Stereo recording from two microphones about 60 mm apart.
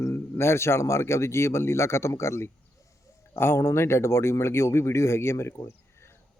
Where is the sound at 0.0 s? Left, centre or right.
Left.